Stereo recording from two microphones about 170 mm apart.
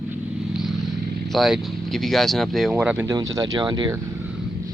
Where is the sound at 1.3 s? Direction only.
Centre (ahead or behind).